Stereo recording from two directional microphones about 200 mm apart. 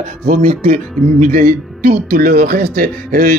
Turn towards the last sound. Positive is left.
turn(degrees=-45)  # may be behind; listen again after turning